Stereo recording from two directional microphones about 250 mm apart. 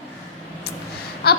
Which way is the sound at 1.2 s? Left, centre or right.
Left.